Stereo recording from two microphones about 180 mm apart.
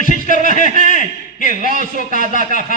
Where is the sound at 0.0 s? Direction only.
45° left (ahead or behind).